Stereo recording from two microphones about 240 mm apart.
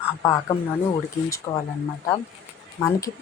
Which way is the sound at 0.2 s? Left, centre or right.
Centre.